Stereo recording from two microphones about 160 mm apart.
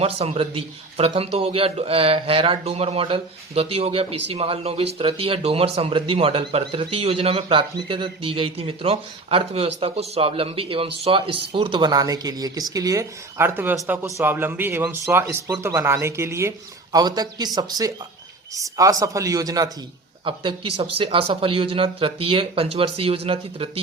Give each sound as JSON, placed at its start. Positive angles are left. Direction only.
{"t": 0.0, "sound": "speech", "side_deg": -40}